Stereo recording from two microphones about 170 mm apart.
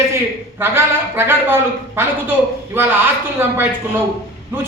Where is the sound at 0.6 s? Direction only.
15° right (ahead or behind).